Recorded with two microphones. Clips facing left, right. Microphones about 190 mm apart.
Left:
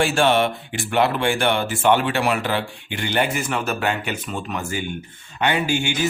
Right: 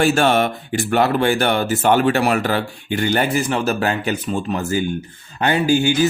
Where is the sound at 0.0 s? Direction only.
40° right (ahead or behind).